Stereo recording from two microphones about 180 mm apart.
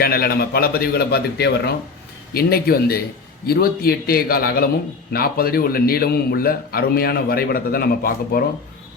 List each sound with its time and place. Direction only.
0.0 s a man's voice: 60° left (ahead or behind)